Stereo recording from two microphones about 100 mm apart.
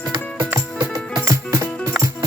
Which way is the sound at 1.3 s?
25° right (ahead or behind).